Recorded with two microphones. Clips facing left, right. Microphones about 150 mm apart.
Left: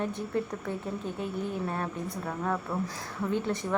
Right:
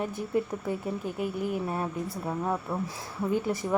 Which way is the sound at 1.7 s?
15° right (ahead or behind).